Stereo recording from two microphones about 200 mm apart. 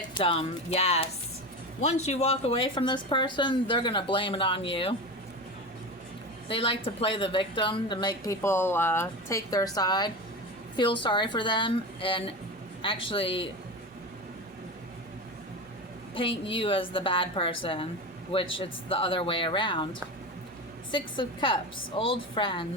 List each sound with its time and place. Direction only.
0.1 s a woman's voice: 25° left (ahead or behind)
6.5 s a woman's voice: 25° left (ahead or behind)
16.1 s a woman's voice: 25° left (ahead or behind)